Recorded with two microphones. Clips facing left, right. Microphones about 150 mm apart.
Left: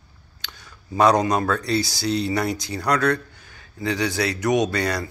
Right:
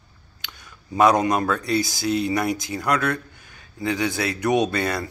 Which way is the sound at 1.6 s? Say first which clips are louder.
Even; 20° right (ahead or behind).